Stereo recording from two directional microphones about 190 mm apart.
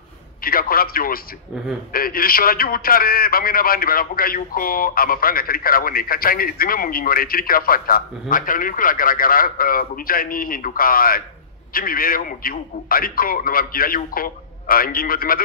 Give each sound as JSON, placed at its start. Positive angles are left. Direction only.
{"t": 0.4, "sound": "a man's voice", "side_deg": 50}